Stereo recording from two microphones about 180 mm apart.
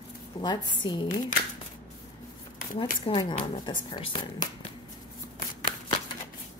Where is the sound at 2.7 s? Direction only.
30° left (ahead or behind).